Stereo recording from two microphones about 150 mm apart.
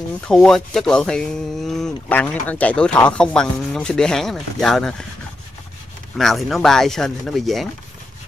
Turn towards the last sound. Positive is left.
turn(degrees=0)  # may be behind; listen again after turning